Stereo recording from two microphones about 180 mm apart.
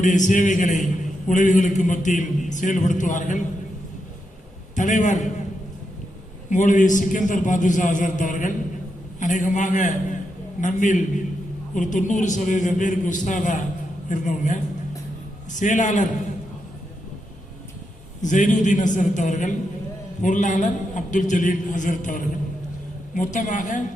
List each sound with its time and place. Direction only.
0.0 s a man's voice: 45° left (ahead or behind)
4.7 s a man's voice: 45° left (ahead or behind)
6.5 s a man's voice: 45° left (ahead or behind)
18.2 s a man's voice: 45° left (ahead or behind)